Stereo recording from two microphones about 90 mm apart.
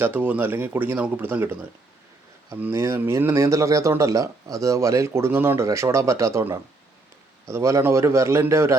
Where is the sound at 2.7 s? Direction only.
30° right (ahead or behind).